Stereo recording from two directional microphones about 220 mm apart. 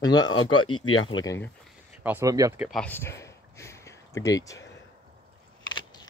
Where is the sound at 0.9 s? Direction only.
65° left (ahead or behind).